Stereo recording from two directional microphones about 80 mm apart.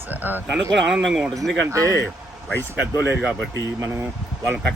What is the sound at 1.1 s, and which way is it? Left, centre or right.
Speech, centre.